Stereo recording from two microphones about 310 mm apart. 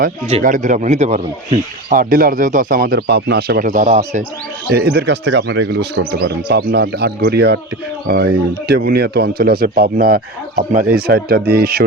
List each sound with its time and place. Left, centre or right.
0.0 s speech: right